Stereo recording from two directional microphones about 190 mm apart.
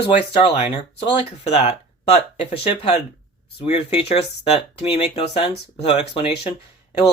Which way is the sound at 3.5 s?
30° left (ahead or behind).